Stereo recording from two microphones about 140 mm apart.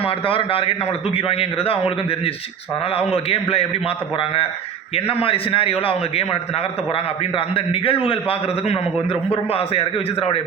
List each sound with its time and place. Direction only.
0.0 s a man's voice: 40° left (ahead or behind)
3.2 s a man's voice: 45° left (ahead or behind)